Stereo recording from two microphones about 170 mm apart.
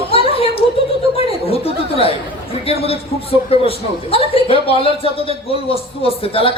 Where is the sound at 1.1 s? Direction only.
35° left (ahead or behind).